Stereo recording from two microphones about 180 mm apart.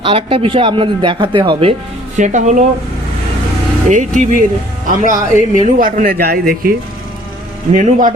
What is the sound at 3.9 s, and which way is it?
Speech, 45° right (ahead or behind).